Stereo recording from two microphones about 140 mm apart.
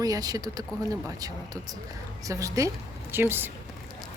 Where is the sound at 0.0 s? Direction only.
25° right (ahead or behind).